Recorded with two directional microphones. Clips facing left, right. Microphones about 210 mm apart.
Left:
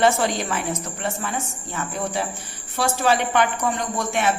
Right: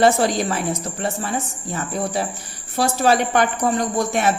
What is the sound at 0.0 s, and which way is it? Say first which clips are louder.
A woman's voice: right 3 dB; 35° right (ahead or behind).